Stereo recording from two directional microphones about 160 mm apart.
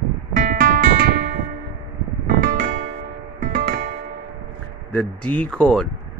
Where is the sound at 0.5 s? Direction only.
65° right (ahead or behind).